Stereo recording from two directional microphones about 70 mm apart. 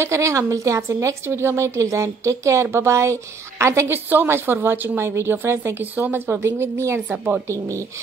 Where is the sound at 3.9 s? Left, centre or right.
Right.